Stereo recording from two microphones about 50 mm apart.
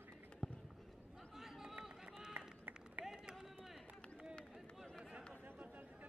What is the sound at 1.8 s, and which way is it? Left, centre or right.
Run, centre.